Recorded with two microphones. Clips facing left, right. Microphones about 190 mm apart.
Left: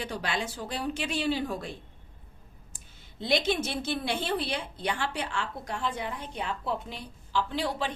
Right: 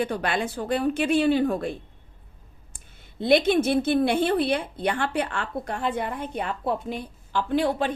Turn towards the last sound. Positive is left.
turn(degrees=-55)  # may be behind; listen again after turning